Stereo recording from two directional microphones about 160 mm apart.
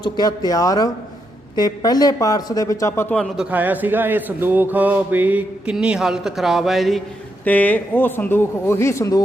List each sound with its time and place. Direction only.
0.0 s a man's voice: 25° left (ahead or behind)
3.2 s a man's voice: 5° right (ahead or behind)
7.4 s speech: 10° left (ahead or behind)